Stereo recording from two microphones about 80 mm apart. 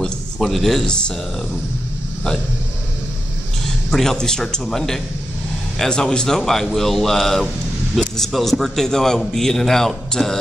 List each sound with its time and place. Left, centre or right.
0.0 s speech: centre
3.9 s speech: centre